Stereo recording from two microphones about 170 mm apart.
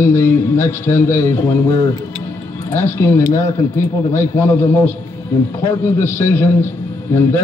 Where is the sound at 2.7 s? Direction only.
15° left (ahead or behind).